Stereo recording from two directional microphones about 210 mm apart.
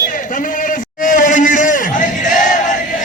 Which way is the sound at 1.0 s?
40° left (ahead or behind).